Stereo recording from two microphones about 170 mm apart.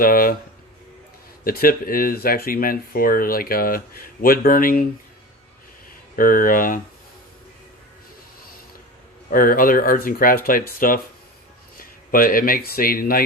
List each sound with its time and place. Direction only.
0.0 s speech: 55° left (ahead or behind)
1.5 s speech: 60° left (ahead or behind)
6.1 s speech: 55° left (ahead or behind)
9.3 s speech: 55° left (ahead or behind)